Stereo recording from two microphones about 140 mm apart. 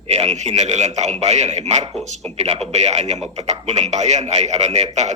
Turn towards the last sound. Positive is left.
turn(degrees=-55)  # may be behind; listen again after turning